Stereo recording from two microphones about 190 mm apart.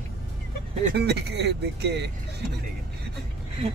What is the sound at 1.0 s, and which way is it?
Speech, 60° right (ahead or behind).